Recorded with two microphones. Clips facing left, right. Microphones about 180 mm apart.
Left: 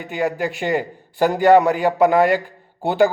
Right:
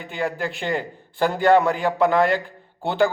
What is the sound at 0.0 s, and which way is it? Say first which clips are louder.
A man's voice: left 4 dB; 15° left (ahead or behind).